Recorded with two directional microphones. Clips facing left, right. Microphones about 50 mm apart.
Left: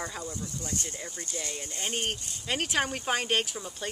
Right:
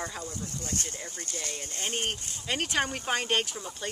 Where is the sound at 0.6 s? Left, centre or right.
Right.